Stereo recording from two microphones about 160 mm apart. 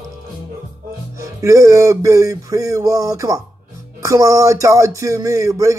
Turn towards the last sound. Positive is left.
turn(degrees=-20)  # may be behind; listen again after turning